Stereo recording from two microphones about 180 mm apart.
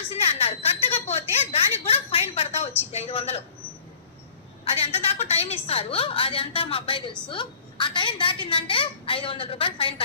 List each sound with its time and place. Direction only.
0.1 s a sound: 35° left (ahead or behind)
2.9 s a woman's voice: 35° left (ahead or behind)
4.6 s a woman's voice: 35° left (ahead or behind)